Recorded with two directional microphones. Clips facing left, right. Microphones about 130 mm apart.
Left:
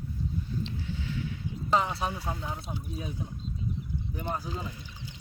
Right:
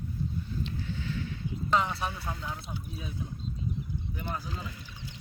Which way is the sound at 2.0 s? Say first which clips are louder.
Left 2 dB; 15° left (ahead or behind).